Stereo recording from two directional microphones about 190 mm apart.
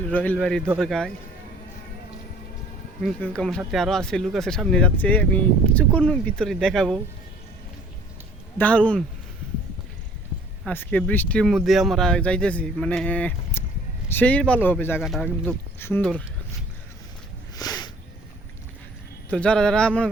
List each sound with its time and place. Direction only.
0.1 s speech: 10° left (ahead or behind)
3.0 s speech: 5° left (ahead or behind)
8.5 s speech: 5° left (ahead or behind)
10.7 s speech: 10° left (ahead or behind)
17.6 s a sound: 20° left (ahead or behind)
19.3 s speech: 5° left (ahead or behind)